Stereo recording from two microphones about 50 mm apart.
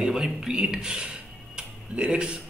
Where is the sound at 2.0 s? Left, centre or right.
Centre.